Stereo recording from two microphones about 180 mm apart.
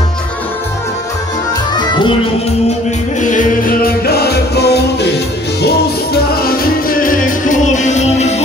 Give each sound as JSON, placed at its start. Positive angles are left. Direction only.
{"t": 1.8, "sound": "music", "side_deg": 25}
{"t": 3.2, "sound": "music", "side_deg": 45}
{"t": 6.3, "sound": "music", "side_deg": 55}